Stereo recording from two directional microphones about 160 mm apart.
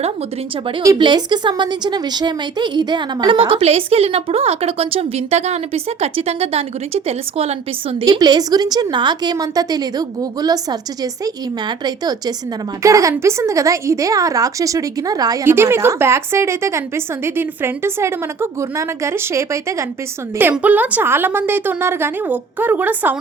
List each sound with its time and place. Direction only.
0.8 s a woman's voice: 25° right (ahead or behind)
8.0 s a woman's voice: 25° right (ahead or behind)